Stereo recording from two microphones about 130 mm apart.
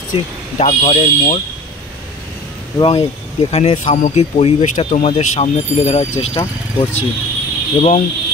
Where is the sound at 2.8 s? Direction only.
50° left (ahead or behind).